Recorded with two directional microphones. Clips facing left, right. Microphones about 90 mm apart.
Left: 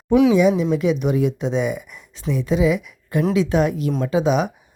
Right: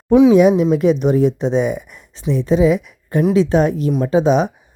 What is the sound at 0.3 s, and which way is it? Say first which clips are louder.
A woman's voice: right 5 dB; 50° right (ahead or behind).